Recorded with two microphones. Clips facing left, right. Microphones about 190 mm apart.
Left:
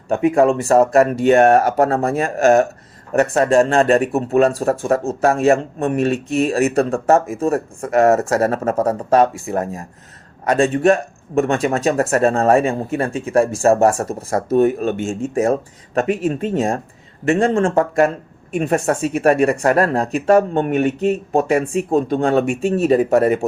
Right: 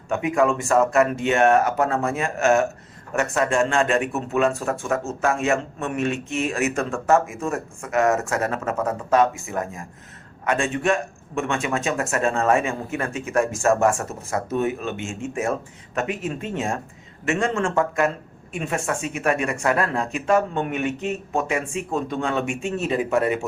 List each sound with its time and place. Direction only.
0.1 s speech: 35° left (ahead or behind)